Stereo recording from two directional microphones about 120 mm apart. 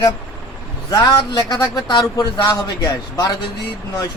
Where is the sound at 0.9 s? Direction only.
35° left (ahead or behind).